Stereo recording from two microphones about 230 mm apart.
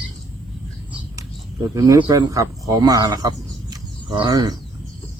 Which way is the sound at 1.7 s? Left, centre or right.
Centre.